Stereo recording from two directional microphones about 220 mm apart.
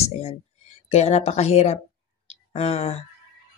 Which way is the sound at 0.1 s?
30° left (ahead or behind).